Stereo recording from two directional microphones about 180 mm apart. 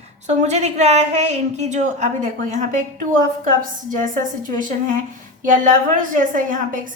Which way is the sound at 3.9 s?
45° right (ahead or behind).